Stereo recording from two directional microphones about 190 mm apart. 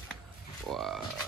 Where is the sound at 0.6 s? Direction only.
Centre (ahead or behind).